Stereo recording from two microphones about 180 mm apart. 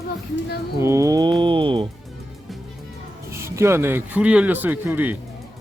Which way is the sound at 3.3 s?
15° right (ahead or behind).